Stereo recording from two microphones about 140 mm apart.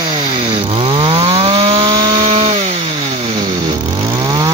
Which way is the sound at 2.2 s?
55° right (ahead or behind).